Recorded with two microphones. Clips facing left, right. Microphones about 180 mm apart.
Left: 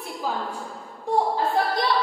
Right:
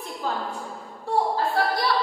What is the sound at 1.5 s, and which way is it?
Speech, 20° left (ahead or behind).